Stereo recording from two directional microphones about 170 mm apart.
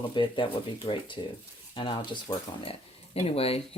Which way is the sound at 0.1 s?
30° left (ahead or behind).